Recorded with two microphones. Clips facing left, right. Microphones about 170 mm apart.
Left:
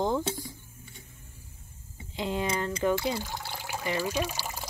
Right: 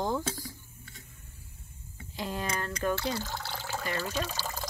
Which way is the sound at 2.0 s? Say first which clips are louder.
Left 4 dB; 20° left (ahead or behind).